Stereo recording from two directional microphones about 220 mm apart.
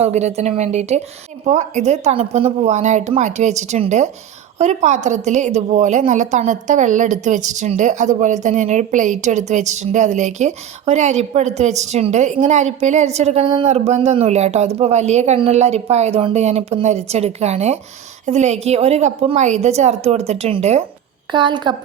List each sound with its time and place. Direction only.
0.0 s a woman's voice: 30° right (ahead or behind)